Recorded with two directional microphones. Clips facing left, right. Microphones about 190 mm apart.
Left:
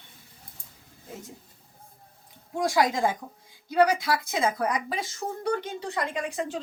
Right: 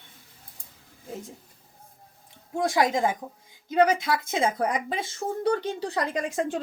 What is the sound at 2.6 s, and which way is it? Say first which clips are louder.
Speech: right 1 dB; 20° right (ahead or behind).